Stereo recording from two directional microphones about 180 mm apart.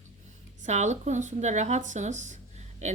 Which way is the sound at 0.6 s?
40° right (ahead or behind).